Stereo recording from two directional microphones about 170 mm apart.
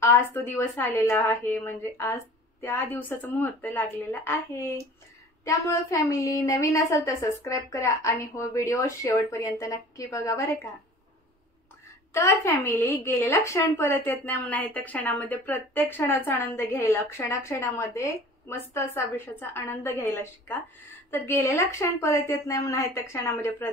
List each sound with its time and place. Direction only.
0.0 s a woman's voice: 15° left (ahead or behind)
12.1 s a woman's voice: 15° left (ahead or behind)